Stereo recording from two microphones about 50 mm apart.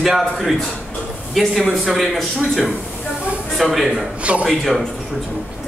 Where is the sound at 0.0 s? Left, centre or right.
Centre.